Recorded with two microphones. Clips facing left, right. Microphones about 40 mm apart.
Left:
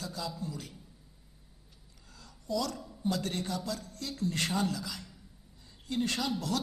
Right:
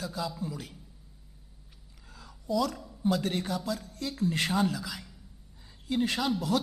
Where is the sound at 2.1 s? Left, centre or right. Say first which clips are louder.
Right 4 dB; centre.